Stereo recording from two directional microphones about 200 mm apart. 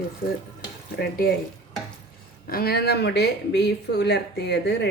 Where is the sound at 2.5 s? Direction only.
50° left (ahead or behind).